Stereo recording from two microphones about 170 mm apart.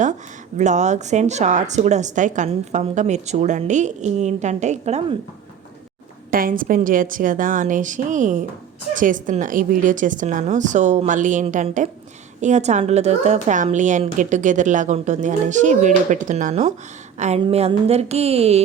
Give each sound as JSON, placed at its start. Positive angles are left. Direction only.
{"t": 0.5, "sound": "a woman's voice", "side_deg": -45}
{"t": 6.3, "sound": "a woman's voice", "side_deg": -55}
{"t": 17.4, "sound": "mantra", "side_deg": -35}